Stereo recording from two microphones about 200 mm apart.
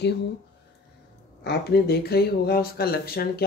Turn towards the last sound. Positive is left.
turn(degrees=50)  # may be behind; listen again after turning